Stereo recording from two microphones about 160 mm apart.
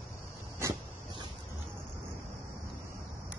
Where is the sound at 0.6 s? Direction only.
20° right (ahead or behind).